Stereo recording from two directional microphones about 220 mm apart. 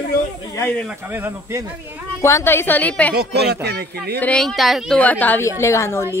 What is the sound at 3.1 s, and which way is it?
A woman's voice, 50° right (ahead or behind).